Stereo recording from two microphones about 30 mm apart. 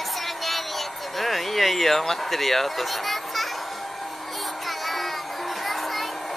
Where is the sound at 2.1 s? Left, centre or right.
Centre.